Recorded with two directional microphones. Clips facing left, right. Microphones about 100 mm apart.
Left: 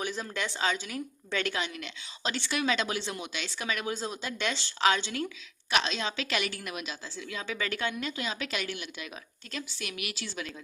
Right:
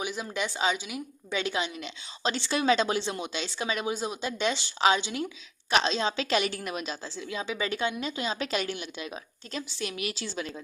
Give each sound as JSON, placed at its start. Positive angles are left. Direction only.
{"t": 0.0, "sound": "a woman's voice", "side_deg": -10}
{"t": 5.7, "sound": "a woman's voice", "side_deg": -30}